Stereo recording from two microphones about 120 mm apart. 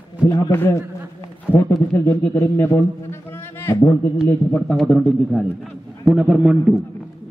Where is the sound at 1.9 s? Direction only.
15° left (ahead or behind).